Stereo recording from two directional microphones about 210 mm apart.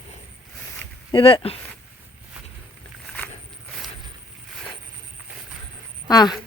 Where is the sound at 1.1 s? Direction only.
25° left (ahead or behind).